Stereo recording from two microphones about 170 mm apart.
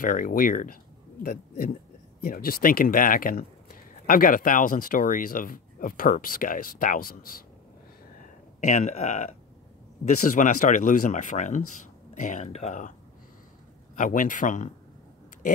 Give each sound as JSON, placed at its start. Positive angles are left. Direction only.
{"t": 0.0, "sound": "speech", "side_deg": 55}
{"t": 8.5, "sound": "speech", "side_deg": 45}
{"t": 13.9, "sound": "speech", "side_deg": 50}